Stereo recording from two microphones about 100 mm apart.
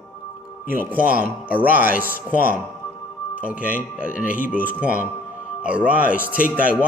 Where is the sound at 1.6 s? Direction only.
15° right (ahead or behind).